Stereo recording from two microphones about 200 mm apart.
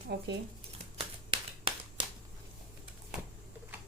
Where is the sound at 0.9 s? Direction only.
25° right (ahead or behind).